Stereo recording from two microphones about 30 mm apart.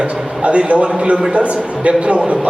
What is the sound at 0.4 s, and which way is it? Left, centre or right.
A man's voice, right.